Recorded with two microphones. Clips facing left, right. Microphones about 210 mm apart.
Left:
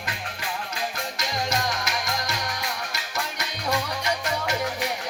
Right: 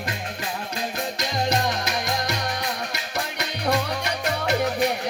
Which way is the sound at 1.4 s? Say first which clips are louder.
Right 4 dB; 60° right (ahead or behind).